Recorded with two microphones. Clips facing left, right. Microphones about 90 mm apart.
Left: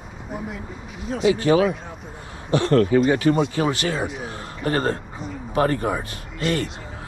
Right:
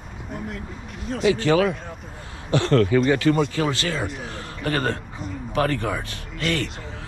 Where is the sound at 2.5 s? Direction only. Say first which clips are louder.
Left 1 dB; 35° left (ahead or behind).